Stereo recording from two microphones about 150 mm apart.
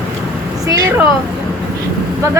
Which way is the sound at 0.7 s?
20° right (ahead or behind).